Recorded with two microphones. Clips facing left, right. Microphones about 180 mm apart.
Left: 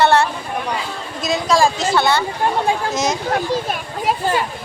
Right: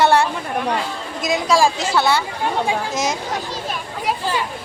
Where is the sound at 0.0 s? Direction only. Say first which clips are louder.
Left 1 dB; 10° right (ahead or behind).